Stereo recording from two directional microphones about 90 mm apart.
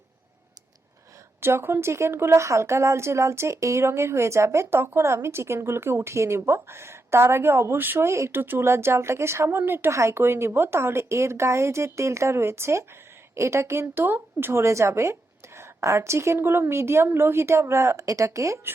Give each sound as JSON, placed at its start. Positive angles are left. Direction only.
{"t": 1.4, "sound": "a woman's voice", "side_deg": -25}